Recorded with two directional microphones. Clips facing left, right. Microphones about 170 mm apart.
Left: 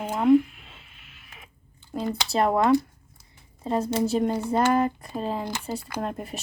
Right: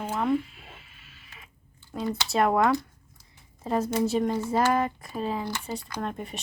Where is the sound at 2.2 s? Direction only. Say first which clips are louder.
Even; centre (ahead or behind).